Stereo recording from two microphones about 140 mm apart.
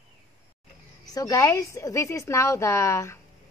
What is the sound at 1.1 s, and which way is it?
Speech, 25° left (ahead or behind).